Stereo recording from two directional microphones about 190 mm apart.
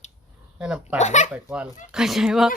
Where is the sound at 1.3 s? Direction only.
5° right (ahead or behind).